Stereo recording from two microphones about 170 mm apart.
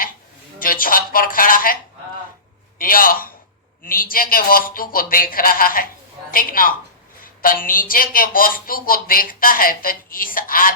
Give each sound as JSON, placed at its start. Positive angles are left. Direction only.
{"t": 0.6, "sound": "speech", "side_deg": 55}